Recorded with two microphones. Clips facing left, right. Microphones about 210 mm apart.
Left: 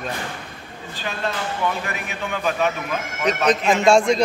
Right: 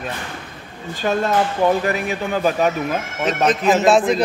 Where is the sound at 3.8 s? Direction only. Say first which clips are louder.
Left 1 dB; 5° right (ahead or behind).